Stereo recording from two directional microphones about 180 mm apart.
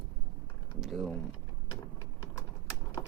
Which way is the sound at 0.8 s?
Centre (ahead or behind).